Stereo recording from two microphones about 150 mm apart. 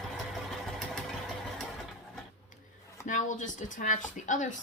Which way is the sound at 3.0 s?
55° left (ahead or behind).